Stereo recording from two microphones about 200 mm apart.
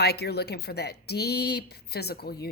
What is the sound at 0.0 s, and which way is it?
Speech, 55° left (ahead or behind).